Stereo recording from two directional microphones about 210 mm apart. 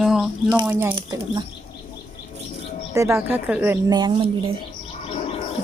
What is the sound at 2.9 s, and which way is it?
A woman's voice, 15° right (ahead or behind).